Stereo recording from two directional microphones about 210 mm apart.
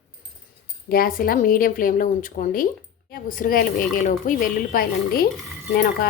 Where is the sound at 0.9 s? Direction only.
45° left (ahead or behind).